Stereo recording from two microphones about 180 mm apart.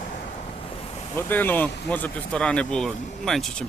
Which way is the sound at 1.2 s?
10° left (ahead or behind).